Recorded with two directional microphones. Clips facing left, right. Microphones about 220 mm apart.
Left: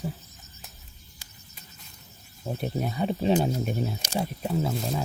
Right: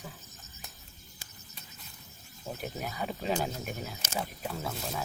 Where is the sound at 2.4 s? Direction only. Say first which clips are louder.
Left 7 dB; 30° left (ahead or behind).